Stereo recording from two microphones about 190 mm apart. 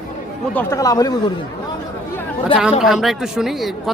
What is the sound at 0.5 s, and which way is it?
Speech, 15° left (ahead or behind).